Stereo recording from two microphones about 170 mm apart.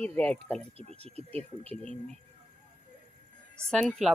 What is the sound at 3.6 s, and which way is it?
Speech, centre (ahead or behind).